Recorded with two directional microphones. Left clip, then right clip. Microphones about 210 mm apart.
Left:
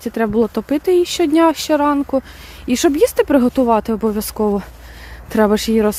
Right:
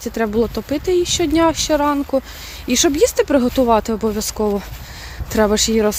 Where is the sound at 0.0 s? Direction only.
25° left (ahead or behind).